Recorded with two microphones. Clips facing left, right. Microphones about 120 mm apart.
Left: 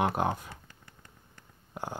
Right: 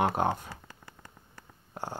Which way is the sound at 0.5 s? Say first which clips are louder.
Right 3 dB; 90° right.